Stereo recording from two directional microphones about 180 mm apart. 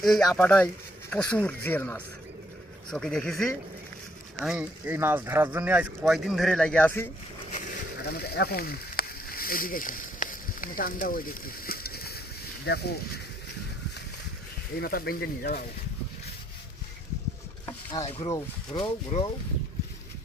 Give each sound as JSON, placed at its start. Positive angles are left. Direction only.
{"t": 0.0, "sound": "a man's voice", "side_deg": 0}
{"t": 8.0, "sound": "a sound", "side_deg": 60}
{"t": 12.6, "sound": "speech", "side_deg": 65}
{"t": 14.8, "sound": "speech", "side_deg": 55}
{"t": 18.2, "sound": "speech", "side_deg": 20}